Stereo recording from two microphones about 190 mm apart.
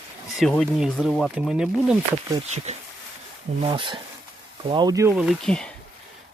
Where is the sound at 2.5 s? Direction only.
35° right (ahead or behind).